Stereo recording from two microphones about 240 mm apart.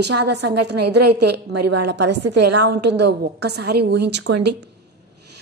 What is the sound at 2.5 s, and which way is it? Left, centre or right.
A woman's voice, right.